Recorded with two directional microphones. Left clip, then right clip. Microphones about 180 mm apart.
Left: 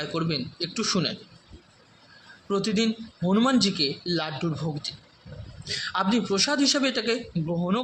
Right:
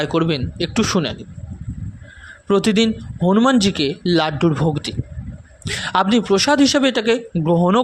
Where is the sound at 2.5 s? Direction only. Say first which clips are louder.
Right 9 dB; 55° right (ahead or behind).